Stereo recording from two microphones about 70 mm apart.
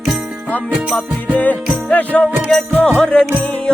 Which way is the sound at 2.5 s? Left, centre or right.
Centre.